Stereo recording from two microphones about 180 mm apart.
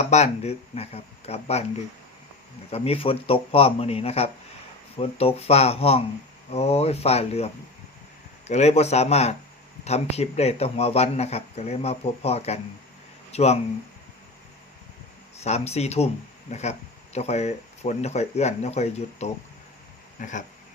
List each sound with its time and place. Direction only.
0.0 s speech: 40° left (ahead or behind)
2.6 s speech: 35° left (ahead or behind)
15.4 s speech: 35° left (ahead or behind)